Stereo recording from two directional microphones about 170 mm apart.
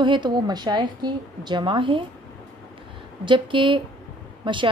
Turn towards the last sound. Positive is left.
turn(degrees=-30)  # may be behind; listen again after turning